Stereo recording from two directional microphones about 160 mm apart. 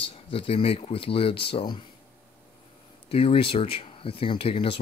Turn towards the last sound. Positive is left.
turn(degrees=35)  # may be behind; listen again after turning